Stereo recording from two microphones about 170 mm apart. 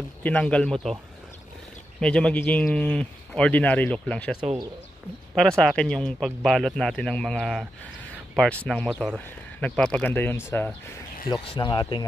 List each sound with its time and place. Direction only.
0.2 s speech: 10° left (ahead or behind)
2.0 s speech: 5° left (ahead or behind)
5.6 s a man's voice: 5° left (ahead or behind)
11.5 s speech: 25° left (ahead or behind)